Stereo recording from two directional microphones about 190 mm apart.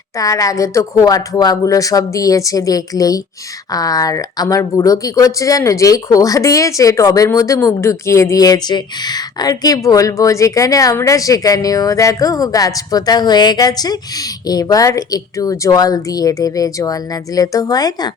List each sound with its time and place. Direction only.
0.2 s speech: 15° left (ahead or behind)